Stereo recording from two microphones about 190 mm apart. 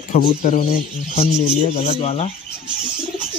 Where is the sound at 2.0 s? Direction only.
35° left (ahead or behind).